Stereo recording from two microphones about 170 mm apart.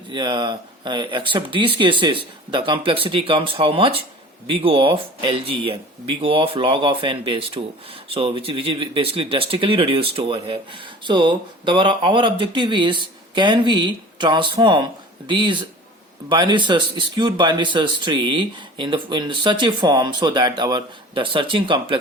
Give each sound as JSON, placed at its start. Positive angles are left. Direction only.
{"t": 0.1, "sound": "speech", "side_deg": -25}